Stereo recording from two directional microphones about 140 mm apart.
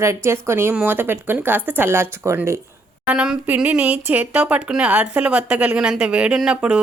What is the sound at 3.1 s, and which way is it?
Speech, 10° right (ahead or behind).